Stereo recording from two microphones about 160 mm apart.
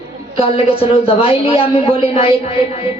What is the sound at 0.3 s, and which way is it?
A man's voice, 35° left (ahead or behind).